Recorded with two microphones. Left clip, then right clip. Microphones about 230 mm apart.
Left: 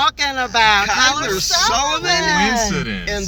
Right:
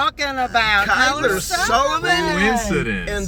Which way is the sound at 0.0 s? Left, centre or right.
Centre.